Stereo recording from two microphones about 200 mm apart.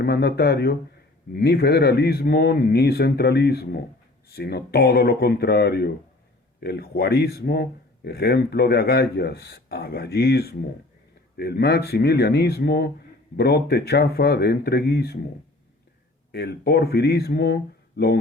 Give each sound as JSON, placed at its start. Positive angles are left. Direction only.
{"t": 0.0, "sound": "speech", "side_deg": 55}
{"t": 16.3, "sound": "speech", "side_deg": 55}